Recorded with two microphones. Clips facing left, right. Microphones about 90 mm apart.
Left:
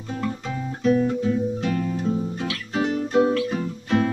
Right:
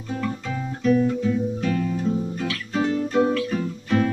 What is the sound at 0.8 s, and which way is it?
Guitar, 25° left (ahead or behind).